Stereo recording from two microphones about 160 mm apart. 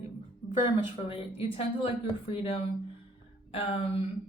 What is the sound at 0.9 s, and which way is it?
A woman's voice, 35° left (ahead or behind).